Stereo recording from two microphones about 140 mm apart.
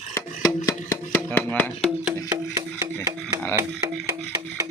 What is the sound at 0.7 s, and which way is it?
Music, 20° left (ahead or behind).